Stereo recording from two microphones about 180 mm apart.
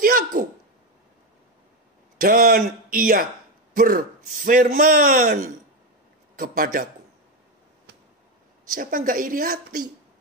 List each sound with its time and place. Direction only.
0.0 s a woman's voice: 50° right (ahead or behind)
2.1 s a woman's voice: 55° right (ahead or behind)
8.7 s a woman's voice: 50° right (ahead or behind)